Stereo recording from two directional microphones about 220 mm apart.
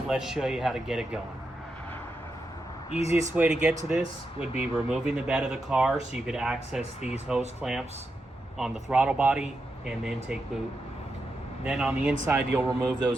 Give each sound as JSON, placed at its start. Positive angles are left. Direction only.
{"t": 0.1, "sound": "speech", "side_deg": 0}
{"t": 2.9, "sound": "speech", "side_deg": 30}
{"t": 3.3, "sound": "speech", "side_deg": -5}
{"t": 11.6, "sound": "speech", "side_deg": -5}